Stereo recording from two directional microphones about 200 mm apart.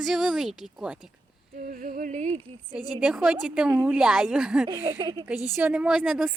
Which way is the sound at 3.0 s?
5° right (ahead or behind).